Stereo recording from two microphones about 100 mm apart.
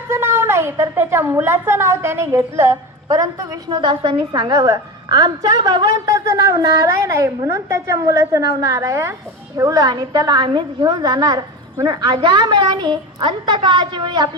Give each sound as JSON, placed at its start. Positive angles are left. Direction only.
{"t": 0.1, "sound": "a woman's voice", "side_deg": -25}
{"t": 3.1, "sound": "a woman's voice", "side_deg": -40}